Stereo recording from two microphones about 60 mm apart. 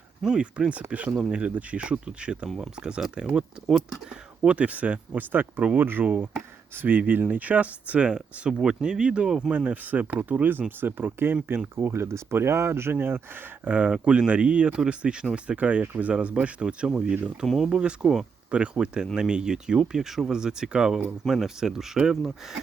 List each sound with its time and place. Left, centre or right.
0.3 s speech: centre
9.5 s speech: right
13.7 s speech: right
17.4 s speech: centre
17.7 s speech: centre